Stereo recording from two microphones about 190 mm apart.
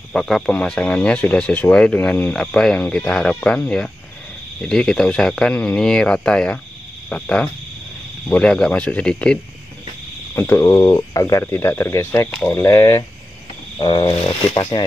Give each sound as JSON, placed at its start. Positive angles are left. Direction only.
{"t": 0.1, "sound": "speech", "side_deg": 0}